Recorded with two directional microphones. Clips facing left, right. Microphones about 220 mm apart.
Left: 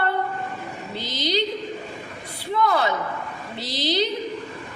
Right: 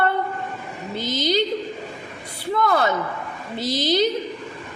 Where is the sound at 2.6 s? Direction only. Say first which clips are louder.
Right 1 dB; 45° right (ahead or behind).